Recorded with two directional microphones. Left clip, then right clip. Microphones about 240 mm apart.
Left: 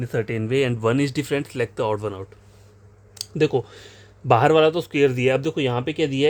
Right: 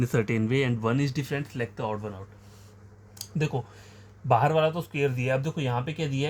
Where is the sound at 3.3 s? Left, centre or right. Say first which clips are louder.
Left 11 dB; left.